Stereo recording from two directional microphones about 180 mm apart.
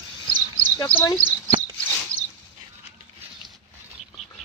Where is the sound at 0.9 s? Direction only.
10° left (ahead or behind).